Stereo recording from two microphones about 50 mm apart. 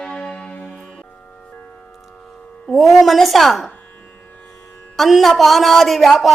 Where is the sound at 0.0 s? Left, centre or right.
Centre.